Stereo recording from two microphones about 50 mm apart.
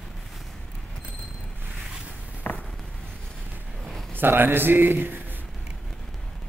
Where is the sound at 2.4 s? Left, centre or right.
Left.